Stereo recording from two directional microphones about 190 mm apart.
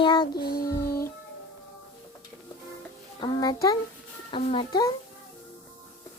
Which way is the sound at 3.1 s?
20° left (ahead or behind).